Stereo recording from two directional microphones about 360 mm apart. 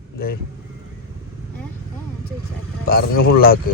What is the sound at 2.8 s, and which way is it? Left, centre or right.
Speech, left.